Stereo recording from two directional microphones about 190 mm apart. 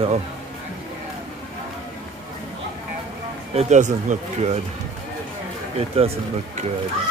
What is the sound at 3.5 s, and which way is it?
Speech, 40° right (ahead or behind).